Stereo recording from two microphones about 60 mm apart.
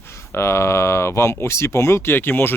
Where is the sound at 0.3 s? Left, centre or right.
Left.